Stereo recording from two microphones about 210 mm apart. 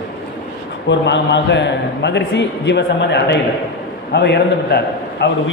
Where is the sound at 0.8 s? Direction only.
55° left (ahead or behind).